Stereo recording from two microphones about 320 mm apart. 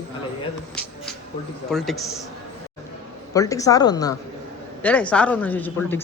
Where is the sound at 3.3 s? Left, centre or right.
Centre.